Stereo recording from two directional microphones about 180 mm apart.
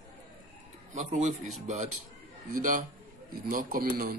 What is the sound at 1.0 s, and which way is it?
A man's voice, 40° right (ahead or behind).